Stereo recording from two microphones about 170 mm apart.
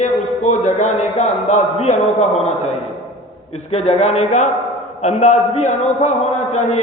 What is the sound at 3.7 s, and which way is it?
A man's voice, 40° left (ahead or behind).